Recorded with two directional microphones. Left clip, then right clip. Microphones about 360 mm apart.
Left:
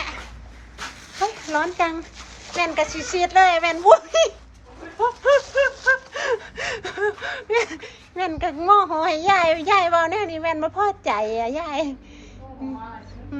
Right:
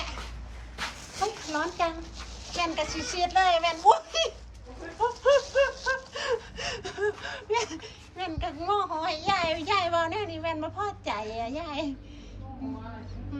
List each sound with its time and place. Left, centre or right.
1.5 s gasp: centre
4.9 s a sound: centre
6.1 s gasp: centre